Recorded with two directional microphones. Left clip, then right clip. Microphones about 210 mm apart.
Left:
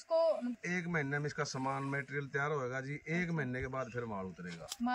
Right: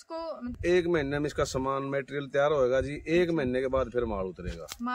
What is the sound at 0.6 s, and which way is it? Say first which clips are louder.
Speech: right 12 dB; 35° right (ahead or behind).